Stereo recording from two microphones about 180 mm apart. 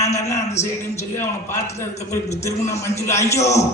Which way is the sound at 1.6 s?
40° left (ahead or behind).